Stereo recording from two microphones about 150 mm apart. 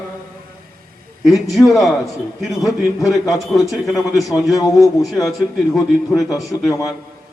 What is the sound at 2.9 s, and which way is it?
Speech, 20° left (ahead or behind).